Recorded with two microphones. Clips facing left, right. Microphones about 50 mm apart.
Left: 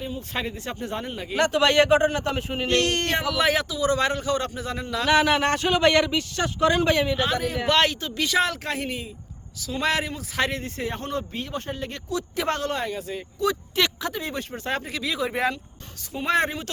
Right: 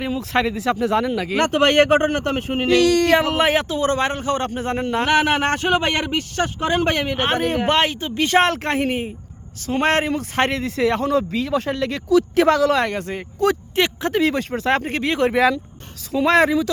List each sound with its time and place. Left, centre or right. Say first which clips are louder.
0.0 s speech: right 9 dB; right
1.4 s speech: right 3 dB; right
3.0 s speech: right 9 dB; right
3.2 s a man's voice: right 4 dB; right
6.6 s speech: left 1 dB; right
6.8 s speech: right 2 dB; right
7.7 s speech: right 3 dB; right
8.3 s speech: right 7 dB; right
10.5 s speech: right 10 dB; right
13.7 s speech: right 5 dB; right
14.1 s speech: right 11 dB; right
14.8 s speech: right 8 dB; right